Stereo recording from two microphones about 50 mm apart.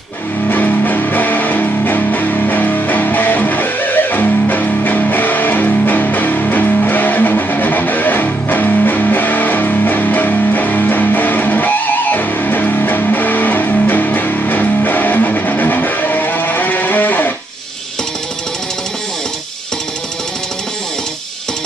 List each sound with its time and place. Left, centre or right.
0.5 s music: left